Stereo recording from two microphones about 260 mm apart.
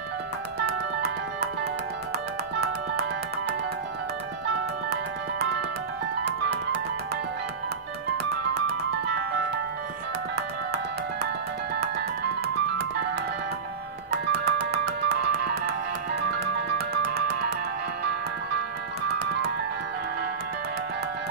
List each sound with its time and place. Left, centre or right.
6.2 s music: right
10.3 s music: right
14.3 s music: right